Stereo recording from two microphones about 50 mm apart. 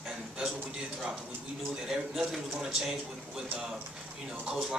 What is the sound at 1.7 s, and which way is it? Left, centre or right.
A man's voice, centre.